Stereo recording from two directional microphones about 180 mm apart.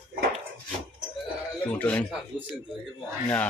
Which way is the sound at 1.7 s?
10° left (ahead or behind).